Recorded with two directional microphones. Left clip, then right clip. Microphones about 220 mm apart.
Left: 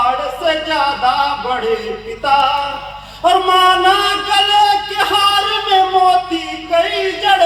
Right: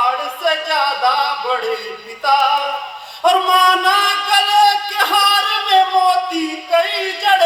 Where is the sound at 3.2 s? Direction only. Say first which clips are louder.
Left 1 dB; 30° right (ahead or behind).